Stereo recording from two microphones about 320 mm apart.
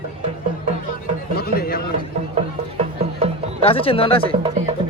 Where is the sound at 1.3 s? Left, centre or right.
Left.